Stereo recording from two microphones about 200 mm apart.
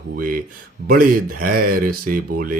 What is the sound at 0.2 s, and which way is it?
Mantra, 45° right (ahead or behind).